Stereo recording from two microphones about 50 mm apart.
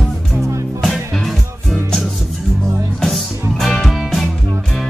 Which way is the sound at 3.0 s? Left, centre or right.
Centre.